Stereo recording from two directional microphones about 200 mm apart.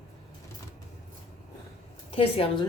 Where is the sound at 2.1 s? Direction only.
25° left (ahead or behind).